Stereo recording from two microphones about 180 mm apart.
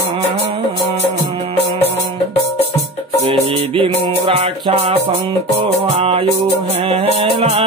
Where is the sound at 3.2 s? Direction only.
30° right (ahead or behind).